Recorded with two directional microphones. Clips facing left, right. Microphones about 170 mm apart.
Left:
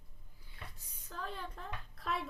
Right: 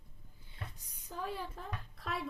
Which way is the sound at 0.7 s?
10° right (ahead or behind).